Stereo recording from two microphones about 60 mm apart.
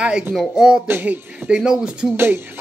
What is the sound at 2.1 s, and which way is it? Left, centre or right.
Speech, right.